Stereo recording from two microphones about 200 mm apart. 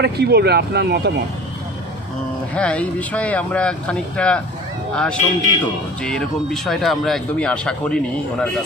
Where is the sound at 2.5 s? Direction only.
5° left (ahead or behind).